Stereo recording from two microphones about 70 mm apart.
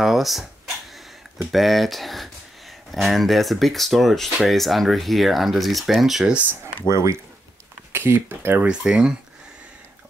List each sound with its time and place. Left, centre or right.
0.0 s dog: centre
1.5 s speech: centre
6.9 s speech: right
7.9 s speech: right
8.6 s speech: centre